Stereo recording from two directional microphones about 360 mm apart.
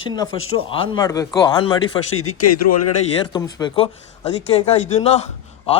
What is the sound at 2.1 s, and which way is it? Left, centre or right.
Speech, left.